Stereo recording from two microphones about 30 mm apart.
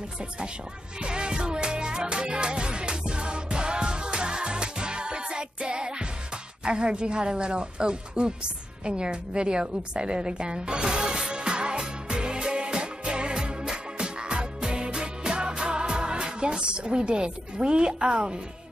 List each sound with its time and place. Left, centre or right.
1.0 s music: right
6.6 s a woman's voice: right
11.3 s music: right